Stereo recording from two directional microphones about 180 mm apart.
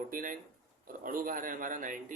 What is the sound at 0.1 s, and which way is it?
Speech, 50° right (ahead or behind).